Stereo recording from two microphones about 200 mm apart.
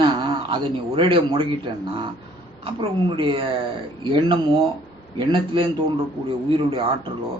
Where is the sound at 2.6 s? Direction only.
25° right (ahead or behind).